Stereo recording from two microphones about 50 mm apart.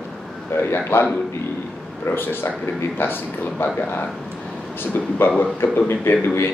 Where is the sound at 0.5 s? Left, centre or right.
Left.